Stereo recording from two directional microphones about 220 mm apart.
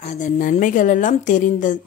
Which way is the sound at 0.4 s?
35° left (ahead or behind).